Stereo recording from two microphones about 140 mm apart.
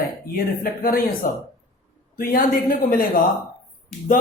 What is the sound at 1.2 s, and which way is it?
Speech, 90° left.